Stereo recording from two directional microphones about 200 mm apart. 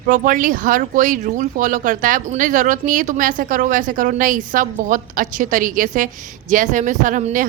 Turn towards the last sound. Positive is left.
turn(degrees=-40)  # may be behind; listen again after turning